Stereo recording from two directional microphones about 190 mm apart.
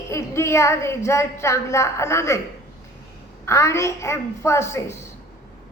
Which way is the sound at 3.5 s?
15° left (ahead or behind).